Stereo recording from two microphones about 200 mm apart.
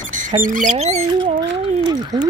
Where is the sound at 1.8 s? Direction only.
20° right (ahead or behind).